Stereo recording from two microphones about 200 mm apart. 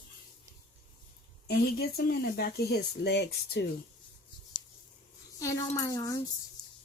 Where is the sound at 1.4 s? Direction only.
50° left (ahead or behind).